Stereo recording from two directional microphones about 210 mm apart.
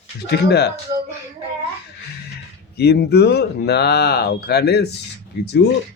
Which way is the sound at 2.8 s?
50° left (ahead or behind).